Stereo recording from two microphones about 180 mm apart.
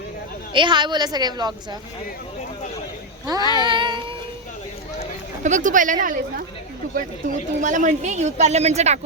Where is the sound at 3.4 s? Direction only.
25° left (ahead or behind).